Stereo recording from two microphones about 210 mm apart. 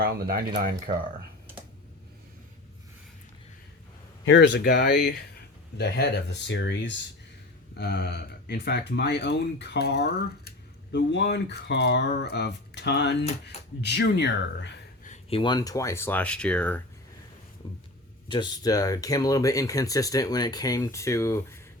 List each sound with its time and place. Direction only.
0.0 s speech: 45° right (ahead or behind)
4.3 s speech: 55° left (ahead or behind)
15.0 s speech: 30° left (ahead or behind); by 16.8 s 5° left (ahead or behind)
17.6 s a sound: 25° left (ahead or behind)
18.3 s speech: 20° left (ahead or behind)